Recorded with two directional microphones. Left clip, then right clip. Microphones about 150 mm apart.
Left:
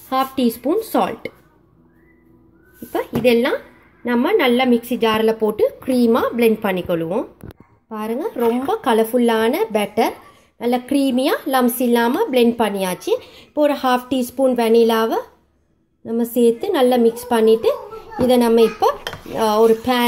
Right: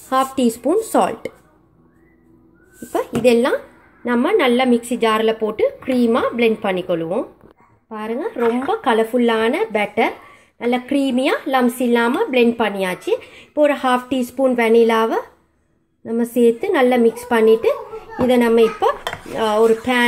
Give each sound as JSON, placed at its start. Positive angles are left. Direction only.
{"t": 0.1, "sound": "a woman's voice", "side_deg": -10}
{"t": 2.9, "sound": "a woman's voice", "side_deg": -10}
{"t": 5.2, "sound": "a woman's voice", "side_deg": 15}
{"t": 16.3, "sound": "a woman's voice", "side_deg": 0}